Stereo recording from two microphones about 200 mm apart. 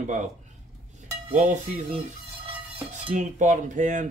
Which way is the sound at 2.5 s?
30° right (ahead or behind).